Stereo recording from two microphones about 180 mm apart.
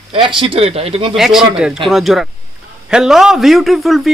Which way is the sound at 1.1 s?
Centre (ahead or behind).